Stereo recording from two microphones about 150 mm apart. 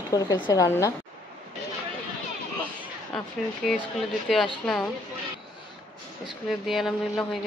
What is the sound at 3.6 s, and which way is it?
A woman's voice, centre (ahead or behind).